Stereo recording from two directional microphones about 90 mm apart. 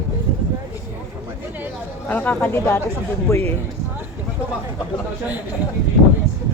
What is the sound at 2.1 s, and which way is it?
Speech, 20° left (ahead or behind).